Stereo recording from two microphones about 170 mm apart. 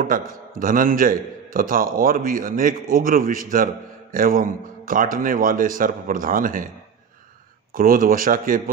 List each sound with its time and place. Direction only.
0.0 s a man's voice: 55° right (ahead or behind)
7.7 s speech: 55° right (ahead or behind)